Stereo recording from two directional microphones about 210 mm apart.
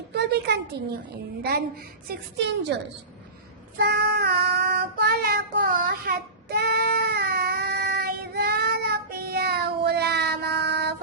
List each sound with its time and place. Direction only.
0.1 s a sound: 50° right (ahead or behind)
1.4 s a woman's voice: 50° right (ahead or behind)
3.8 s child singing: 55° right (ahead or behind)